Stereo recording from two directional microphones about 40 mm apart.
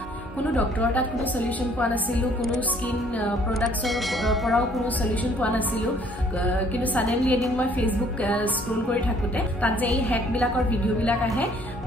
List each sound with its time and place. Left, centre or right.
0.6 s a woman's voice: left
3.5 s speech: centre
6.4 s music: left
7.2 s a woman's voice: left
9.6 s a woman's voice: left